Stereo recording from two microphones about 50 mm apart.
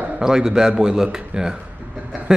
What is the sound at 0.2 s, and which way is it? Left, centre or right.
Speech, centre.